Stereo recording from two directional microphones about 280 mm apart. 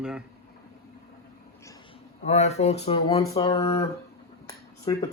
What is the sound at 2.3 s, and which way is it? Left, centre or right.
Speech, left.